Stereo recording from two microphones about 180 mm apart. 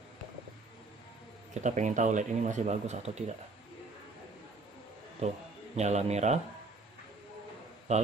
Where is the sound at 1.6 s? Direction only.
40° right (ahead or behind).